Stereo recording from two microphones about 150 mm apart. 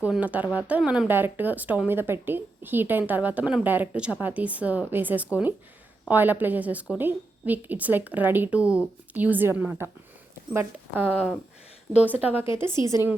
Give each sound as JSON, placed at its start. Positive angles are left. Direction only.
{"t": 0.0, "sound": "speech", "side_deg": -10}
{"t": 12.1, "sound": "speech", "side_deg": -10}